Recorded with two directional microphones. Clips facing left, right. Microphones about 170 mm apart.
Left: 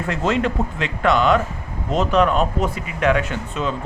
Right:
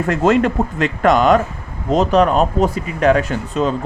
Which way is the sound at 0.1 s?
45° right (ahead or behind).